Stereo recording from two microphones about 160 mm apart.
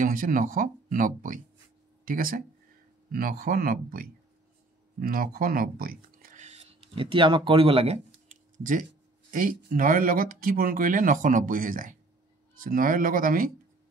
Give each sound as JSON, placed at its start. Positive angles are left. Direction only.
{"t": 0.0, "sound": "speech", "side_deg": -55}
{"t": 6.4, "sound": "a sound", "side_deg": -40}
{"t": 9.3, "sound": "speech", "side_deg": -65}